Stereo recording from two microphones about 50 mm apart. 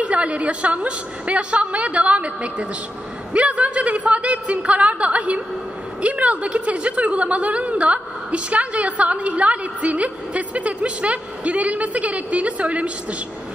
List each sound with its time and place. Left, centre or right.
0.0 s a woman's voice: right